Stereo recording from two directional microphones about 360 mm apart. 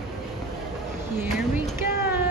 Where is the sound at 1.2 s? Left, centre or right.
Centre.